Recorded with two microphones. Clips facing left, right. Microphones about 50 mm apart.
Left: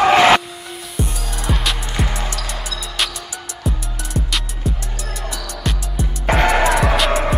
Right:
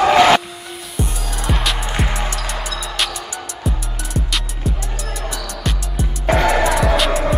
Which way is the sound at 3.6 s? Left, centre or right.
Centre.